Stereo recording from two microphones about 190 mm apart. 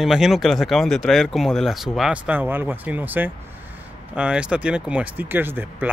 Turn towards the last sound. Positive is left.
turn(degrees=-10)  # may be behind; listen again after turning